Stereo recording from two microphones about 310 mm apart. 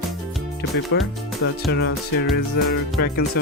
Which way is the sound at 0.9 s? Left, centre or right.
Left.